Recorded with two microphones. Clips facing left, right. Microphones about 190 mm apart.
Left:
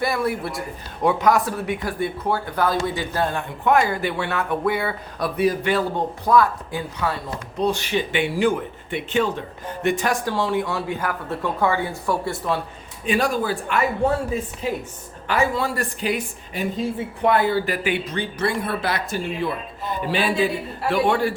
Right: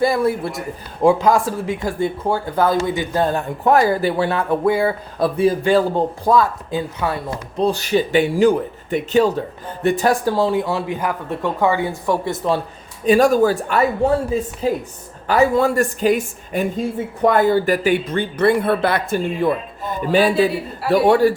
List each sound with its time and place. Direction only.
0.0 s speech: 25° right (ahead or behind)
3.3 s speech: 35° right (ahead or behind); by 7.1 s 20° right (ahead or behind)
7.6 s speech: 40° right (ahead or behind)
10.6 s a man's voice: 20° right (ahead or behind)
13.1 s speech: 45° right (ahead or behind)